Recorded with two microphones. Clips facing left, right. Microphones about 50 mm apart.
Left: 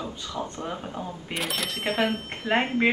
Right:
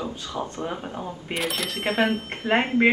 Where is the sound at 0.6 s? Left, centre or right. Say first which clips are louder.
Right 2 dB; centre.